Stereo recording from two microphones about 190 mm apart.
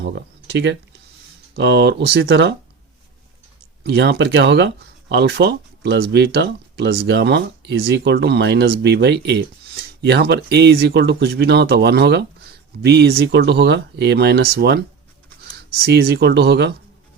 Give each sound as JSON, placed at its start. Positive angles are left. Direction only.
{"t": 0.0, "sound": "speech", "side_deg": -60}
{"t": 3.8, "sound": "speech", "side_deg": -60}